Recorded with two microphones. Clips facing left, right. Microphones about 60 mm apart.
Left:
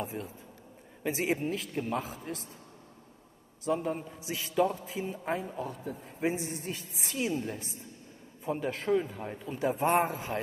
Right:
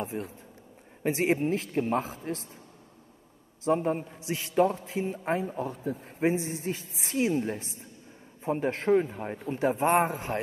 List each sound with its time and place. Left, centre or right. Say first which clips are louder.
0.1 s a man's voice: right 4 dB; right
1.4 s a man's voice: right 5 dB; right
3.6 s a man's voice: right 5 dB; right
4.3 s a man's voice: right 4 dB; right
9.6 s a man's voice: right 3 dB; right